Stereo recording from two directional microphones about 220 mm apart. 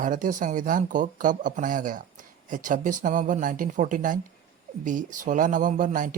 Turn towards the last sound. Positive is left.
turn(degrees=-35)  # may be behind; listen again after turning